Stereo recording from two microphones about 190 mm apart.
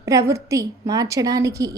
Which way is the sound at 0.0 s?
15° right (ahead or behind).